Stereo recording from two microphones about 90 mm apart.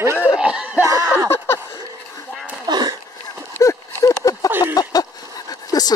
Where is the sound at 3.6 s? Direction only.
40° left (ahead or behind).